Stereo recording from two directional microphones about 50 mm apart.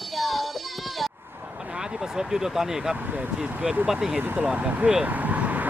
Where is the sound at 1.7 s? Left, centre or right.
Centre.